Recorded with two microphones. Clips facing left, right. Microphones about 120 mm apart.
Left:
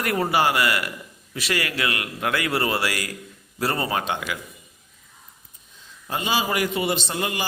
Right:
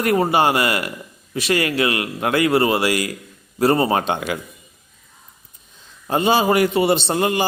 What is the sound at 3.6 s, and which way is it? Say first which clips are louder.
Speech: right 8 dB; 30° right (ahead or behind).